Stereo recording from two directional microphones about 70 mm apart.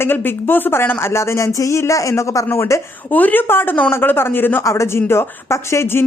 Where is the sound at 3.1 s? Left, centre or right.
Left.